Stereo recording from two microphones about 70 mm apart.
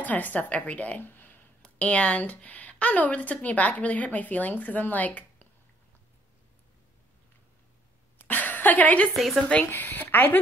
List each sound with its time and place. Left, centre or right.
0.0 s a woman's voice: left
1.6 s a woman's voice: centre
8.2 s a sound: left
9.1 s speech: centre
9.7 s a woman's voice: left